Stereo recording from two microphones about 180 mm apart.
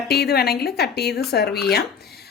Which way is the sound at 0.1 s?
60° left (ahead or behind).